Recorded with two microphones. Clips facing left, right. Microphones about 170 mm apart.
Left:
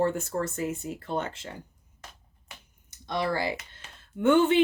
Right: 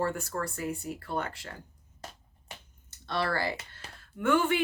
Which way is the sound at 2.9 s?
15° left (ahead or behind).